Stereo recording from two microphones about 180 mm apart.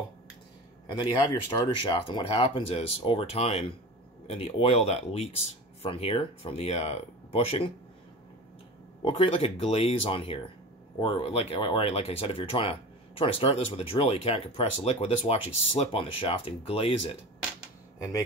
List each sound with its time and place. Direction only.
0.8 s speech: 25° left (ahead or behind)
9.0 s speech: 30° left (ahead or behind)
17.9 s speech: 15° left (ahead or behind)